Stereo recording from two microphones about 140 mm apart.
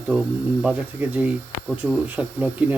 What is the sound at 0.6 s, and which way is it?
Speech, 10° right (ahead or behind).